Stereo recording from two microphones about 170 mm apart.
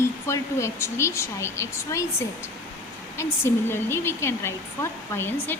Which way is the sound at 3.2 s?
15° left (ahead or behind).